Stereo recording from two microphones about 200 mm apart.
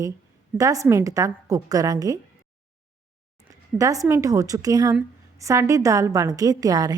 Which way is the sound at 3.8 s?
15° right (ahead or behind).